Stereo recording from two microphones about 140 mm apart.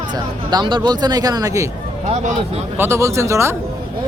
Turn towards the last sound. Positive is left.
turn(degrees=-20)  # may be behind; listen again after turning